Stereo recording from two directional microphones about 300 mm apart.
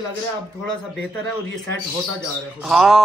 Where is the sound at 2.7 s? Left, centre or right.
Centre.